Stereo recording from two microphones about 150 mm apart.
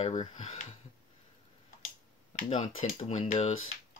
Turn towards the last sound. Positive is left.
turn(degrees=50)  # may be behind; listen again after turning